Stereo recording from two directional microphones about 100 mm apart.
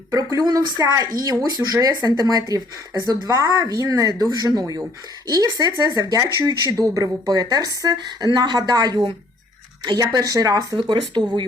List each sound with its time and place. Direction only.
0.1 s a woman's voice: 35° right (ahead or behind)
10.8 s speech: 50° right (ahead or behind)